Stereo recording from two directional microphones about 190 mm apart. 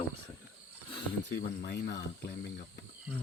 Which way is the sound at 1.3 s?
60° left (ahead or behind).